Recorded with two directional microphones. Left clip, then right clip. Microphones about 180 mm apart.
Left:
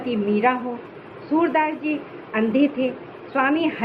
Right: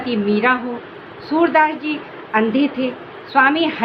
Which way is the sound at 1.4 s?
60° right (ahead or behind).